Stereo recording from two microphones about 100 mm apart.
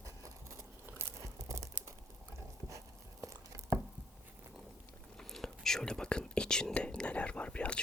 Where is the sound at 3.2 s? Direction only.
30° right (ahead or behind).